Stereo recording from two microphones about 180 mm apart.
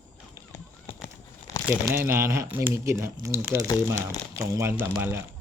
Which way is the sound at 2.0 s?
15° right (ahead or behind).